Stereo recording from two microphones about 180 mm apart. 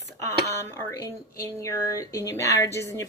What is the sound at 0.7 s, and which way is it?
Speech, 15° left (ahead or behind).